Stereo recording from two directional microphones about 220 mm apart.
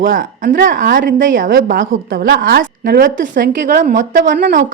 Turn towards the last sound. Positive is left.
turn(degrees=-45)  # may be behind; listen again after turning